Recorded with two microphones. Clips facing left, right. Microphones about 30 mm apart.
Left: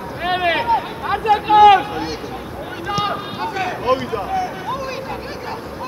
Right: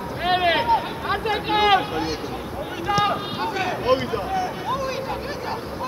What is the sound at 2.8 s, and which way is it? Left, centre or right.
Run, centre.